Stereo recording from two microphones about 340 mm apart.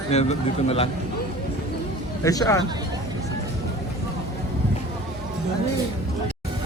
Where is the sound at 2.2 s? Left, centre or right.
Centre.